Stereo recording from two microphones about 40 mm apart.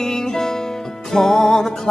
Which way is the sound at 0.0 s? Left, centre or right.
Centre.